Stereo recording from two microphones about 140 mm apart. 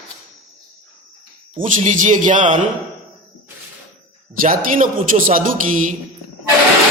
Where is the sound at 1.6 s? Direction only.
65° right (ahead or behind).